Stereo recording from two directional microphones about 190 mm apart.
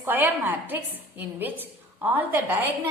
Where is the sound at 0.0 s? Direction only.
10° right (ahead or behind).